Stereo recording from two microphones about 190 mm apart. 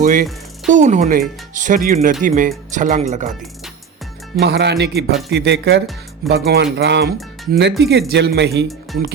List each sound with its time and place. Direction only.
0.0 s speech: 45° right (ahead or behind)
4.4 s speech: 60° right (ahead or behind)